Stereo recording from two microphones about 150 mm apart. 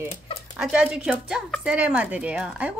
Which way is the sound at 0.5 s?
5° right (ahead or behind).